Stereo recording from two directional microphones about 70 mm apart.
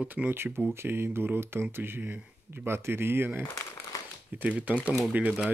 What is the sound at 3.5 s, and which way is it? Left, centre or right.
Crumpling, left.